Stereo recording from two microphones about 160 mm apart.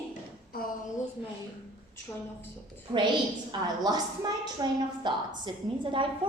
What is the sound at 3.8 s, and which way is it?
A woman's voice, 25° right (ahead or behind).